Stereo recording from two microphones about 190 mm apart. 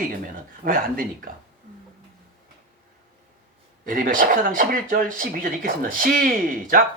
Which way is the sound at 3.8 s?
45° right (ahead or behind).